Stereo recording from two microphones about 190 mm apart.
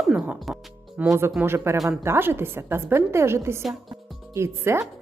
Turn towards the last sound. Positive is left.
turn(degrees=-15)  # may be behind; listen again after turning